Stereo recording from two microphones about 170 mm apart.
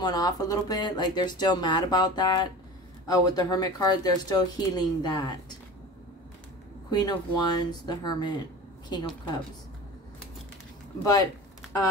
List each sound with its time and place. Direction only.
0.0 s speech: 20° left (ahead or behind)
6.9 s speech: 25° left (ahead or behind)